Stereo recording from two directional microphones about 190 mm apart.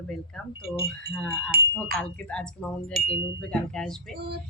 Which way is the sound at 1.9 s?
5° left (ahead or behind).